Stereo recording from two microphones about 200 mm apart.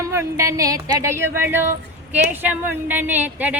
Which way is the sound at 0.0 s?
15° right (ahead or behind).